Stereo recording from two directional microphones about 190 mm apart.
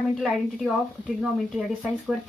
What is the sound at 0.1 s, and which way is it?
A woman's voice, centre (ahead or behind).